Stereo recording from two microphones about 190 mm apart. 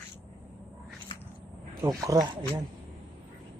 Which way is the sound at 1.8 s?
20° right (ahead or behind).